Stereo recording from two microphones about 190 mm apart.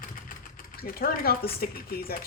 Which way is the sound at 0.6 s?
50° left (ahead or behind).